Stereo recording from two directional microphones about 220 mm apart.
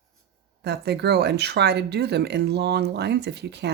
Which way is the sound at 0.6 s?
50° right (ahead or behind).